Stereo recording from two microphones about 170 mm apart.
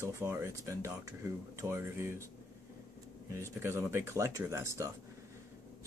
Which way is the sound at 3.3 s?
15° right (ahead or behind).